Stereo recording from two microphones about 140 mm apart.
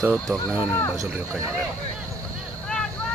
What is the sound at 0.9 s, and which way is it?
Speech, 10° right (ahead or behind).